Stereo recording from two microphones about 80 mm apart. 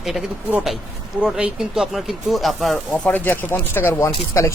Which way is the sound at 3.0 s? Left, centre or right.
Left.